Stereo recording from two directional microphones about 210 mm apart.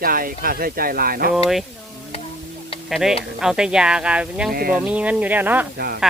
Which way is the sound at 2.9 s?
Centre (ahead or behind).